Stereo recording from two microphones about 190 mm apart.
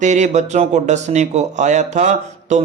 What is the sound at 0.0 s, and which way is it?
A man's voice, 40° right (ahead or behind).